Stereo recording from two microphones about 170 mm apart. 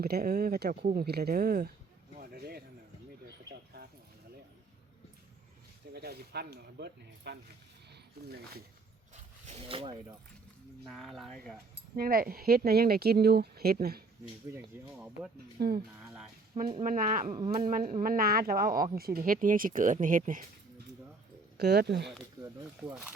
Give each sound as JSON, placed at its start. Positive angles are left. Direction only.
{"t": 0.0, "sound": "speech", "side_deg": -65}
{"t": 2.1, "sound": "a sound", "side_deg": -65}
{"t": 5.9, "sound": "speech", "side_deg": -70}
{"t": 9.1, "sound": "speech", "side_deg": -40}
{"t": 10.8, "sound": "speech", "side_deg": 0}
{"t": 11.9, "sound": "speech", "side_deg": -60}
{"t": 14.5, "sound": "speech", "side_deg": -10}
{"t": 15.5, "sound": "speech", "side_deg": -65}
{"t": 16.8, "sound": "speech", "side_deg": -50}
{"t": 21.6, "sound": "speech", "side_deg": -70}